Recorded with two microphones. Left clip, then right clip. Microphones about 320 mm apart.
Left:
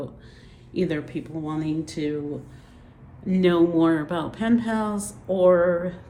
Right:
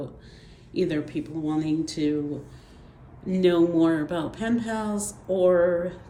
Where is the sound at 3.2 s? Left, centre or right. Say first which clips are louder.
Left 1 dB; centre.